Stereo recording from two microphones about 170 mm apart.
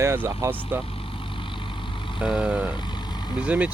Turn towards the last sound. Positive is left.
turn(degrees=-10)  # may be behind; listen again after turning